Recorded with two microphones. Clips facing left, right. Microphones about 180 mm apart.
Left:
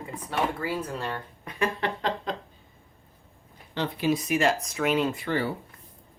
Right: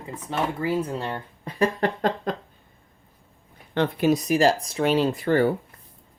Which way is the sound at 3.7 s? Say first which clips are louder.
Right 5 dB; 50° right (ahead or behind).